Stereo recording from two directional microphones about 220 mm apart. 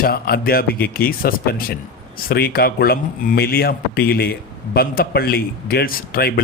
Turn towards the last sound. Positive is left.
turn(degrees=45)  # may be behind; listen again after turning